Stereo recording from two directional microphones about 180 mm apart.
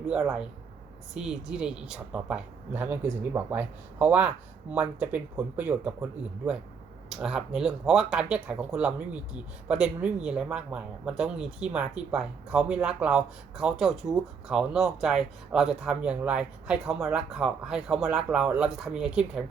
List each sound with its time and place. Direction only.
0.1 s a woman's voice: 5° right (ahead or behind)